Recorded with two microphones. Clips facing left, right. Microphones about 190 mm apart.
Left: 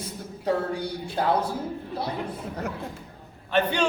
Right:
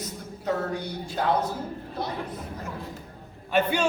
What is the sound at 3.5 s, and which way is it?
Speech, 10° right (ahead or behind).